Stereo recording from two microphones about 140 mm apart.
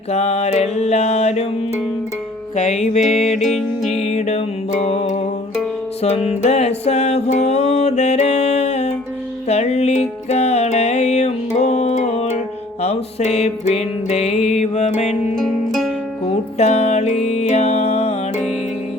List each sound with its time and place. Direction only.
0.1 s mantra: 50° left (ahead or behind)
2.7 s mantra: 50° left (ahead or behind)
3.0 s music: centre (ahead or behind)
4.1 s music: 50° left (ahead or behind)
14.6 s mantra: 55° left (ahead or behind)
15.4 s music: centre (ahead or behind)
16.2 s music: 50° left (ahead or behind)